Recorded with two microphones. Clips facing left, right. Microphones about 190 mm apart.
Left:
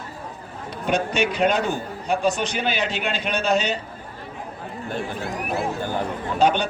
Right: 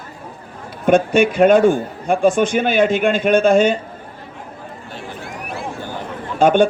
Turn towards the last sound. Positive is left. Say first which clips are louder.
# right 7 dB
turn(degrees=-50)  # may be behind; listen again after turning